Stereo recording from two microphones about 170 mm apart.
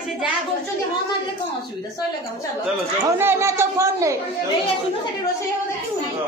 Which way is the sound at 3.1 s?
15° right (ahead or behind).